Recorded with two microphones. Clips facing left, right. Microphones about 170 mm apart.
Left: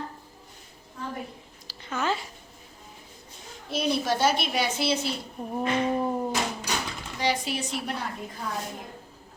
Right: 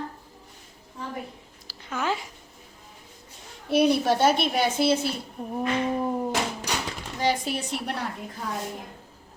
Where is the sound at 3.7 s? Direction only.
60° right (ahead or behind).